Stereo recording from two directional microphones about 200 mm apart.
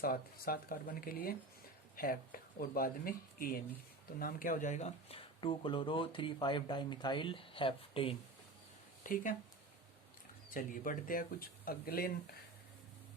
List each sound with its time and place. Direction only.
0.0 s speech: 45° left (ahead or behind); by 8.1 s 25° left (ahead or behind)
9.0 s speech: 40° left (ahead or behind)
10.5 s speech: 45° left (ahead or behind)